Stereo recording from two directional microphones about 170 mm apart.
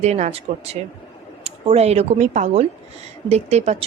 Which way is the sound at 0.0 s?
40° right (ahead or behind).